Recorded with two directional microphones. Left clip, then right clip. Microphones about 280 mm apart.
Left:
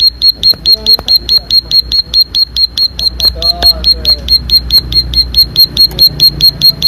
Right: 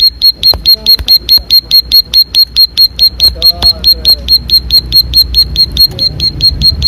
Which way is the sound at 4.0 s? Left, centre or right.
Centre.